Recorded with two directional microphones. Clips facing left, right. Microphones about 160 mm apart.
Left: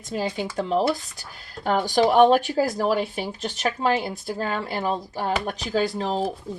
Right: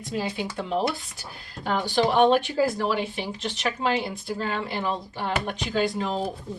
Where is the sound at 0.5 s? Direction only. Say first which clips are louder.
Left 5 dB; 40° left (ahead or behind).